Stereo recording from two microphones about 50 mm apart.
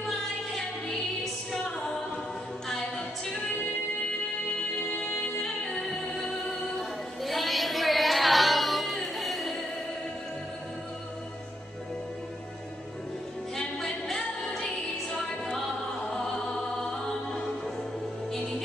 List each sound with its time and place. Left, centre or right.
1.2 s music: centre
4.9 s music: left
5.7 s music: centre
6.8 s a sound: centre
13.6 s music: centre